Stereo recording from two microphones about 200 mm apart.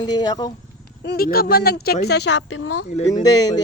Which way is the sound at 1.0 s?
50° left (ahead or behind).